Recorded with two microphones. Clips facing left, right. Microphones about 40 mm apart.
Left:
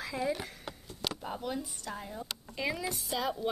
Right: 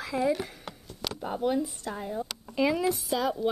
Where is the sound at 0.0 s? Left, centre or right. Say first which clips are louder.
Right 6 dB; centre.